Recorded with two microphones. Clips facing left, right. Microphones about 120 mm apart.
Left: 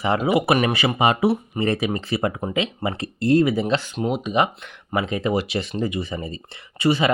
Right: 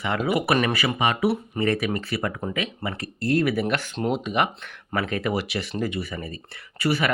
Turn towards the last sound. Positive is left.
turn(degrees=25)  # may be behind; listen again after turning